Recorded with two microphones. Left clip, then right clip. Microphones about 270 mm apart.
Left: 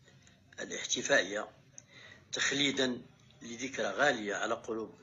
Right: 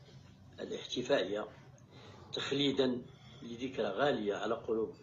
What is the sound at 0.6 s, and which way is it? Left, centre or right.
A man's voice, left.